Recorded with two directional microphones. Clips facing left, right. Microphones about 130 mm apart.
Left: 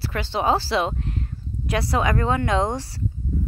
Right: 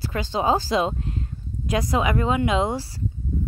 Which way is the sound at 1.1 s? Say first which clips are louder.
Even; 25° right (ahead or behind).